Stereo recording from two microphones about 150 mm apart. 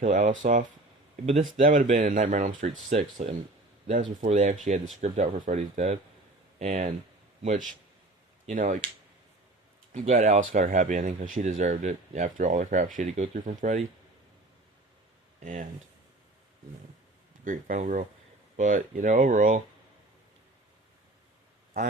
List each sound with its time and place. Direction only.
0.0 s speech: 55° right (ahead or behind)
8.4 s speech: 55° right (ahead or behind)
9.9 s speech: 50° right (ahead or behind)
17.4 s speech: 60° right (ahead or behind)